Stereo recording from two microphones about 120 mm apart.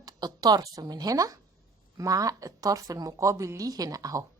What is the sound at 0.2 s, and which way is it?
A woman's voice, 35° right (ahead or behind).